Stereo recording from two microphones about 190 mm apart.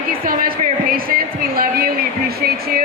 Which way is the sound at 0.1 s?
50° right (ahead or behind).